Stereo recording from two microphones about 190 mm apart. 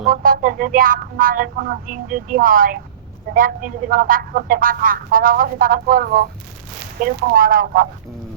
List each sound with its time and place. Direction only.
0.1 s speech: 50° right (ahead or behind)